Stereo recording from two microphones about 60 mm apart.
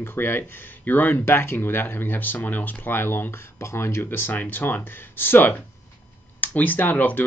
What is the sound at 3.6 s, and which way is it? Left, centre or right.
Speech, left.